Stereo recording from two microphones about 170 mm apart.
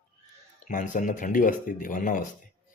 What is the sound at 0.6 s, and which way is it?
Speech, 50° left (ahead or behind).